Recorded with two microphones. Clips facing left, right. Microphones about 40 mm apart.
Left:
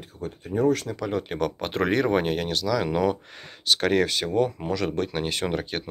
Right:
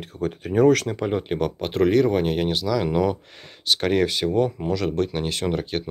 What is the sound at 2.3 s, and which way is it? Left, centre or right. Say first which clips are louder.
Speech: right 2 dB; centre.